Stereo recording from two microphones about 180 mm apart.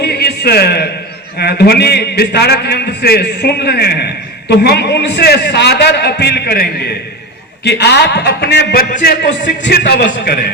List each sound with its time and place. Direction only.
0.0 s a sound: 65° left (ahead or behind)
1.4 s a man's voice: 65° left (ahead or behind)
9.6 s a man's voice: 65° left (ahead or behind)